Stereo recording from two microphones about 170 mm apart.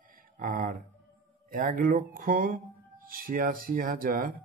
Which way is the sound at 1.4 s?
55° right (ahead or behind).